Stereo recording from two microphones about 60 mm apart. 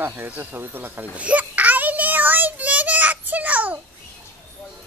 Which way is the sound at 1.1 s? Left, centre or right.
Right.